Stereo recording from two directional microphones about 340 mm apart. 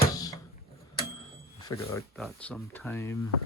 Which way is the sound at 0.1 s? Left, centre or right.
Centre.